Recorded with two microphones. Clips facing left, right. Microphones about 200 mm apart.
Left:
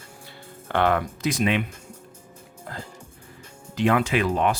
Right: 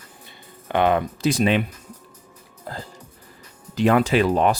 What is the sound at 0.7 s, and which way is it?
Speech, 20° right (ahead or behind).